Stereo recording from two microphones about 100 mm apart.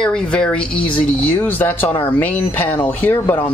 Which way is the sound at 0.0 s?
10° left (ahead or behind).